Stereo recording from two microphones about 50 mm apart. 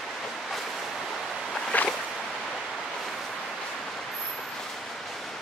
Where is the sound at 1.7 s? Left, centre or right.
Left.